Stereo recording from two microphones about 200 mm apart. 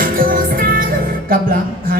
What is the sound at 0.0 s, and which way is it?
Music, 45° right (ahead or behind).